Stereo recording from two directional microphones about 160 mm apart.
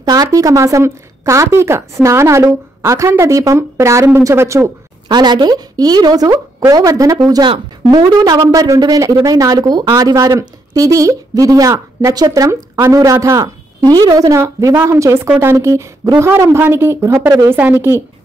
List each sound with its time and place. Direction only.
0.0 s a woman's voice: 20° right (ahead or behind)